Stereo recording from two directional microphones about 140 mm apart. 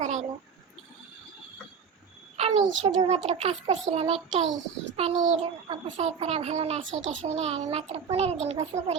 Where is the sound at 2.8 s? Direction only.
50° right (ahead or behind).